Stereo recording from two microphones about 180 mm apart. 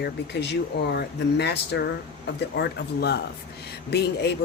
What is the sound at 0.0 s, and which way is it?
Speech, 70° left (ahead or behind).